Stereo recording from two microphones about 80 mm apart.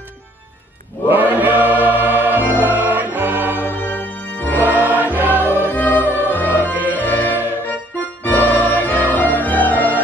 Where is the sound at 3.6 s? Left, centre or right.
Left.